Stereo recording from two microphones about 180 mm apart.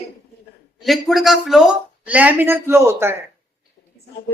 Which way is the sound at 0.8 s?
Centre (ahead or behind).